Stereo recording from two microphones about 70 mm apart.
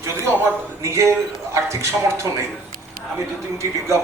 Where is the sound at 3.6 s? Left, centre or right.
Right.